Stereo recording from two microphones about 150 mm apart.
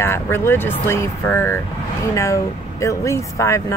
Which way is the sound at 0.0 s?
15° left (ahead or behind).